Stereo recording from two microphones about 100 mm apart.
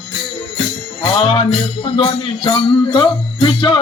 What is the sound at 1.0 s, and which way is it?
Music, 65° left (ahead or behind).